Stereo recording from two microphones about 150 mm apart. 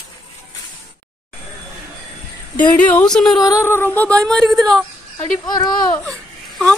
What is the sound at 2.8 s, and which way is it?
Speech, 10° left (ahead or behind).